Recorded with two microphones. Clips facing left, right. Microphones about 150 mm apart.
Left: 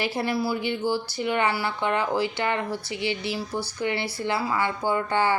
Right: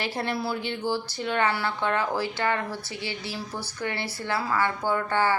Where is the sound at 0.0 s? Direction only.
10° left (ahead or behind).